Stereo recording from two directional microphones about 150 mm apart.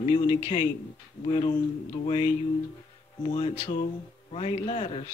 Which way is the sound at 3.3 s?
30° left (ahead or behind).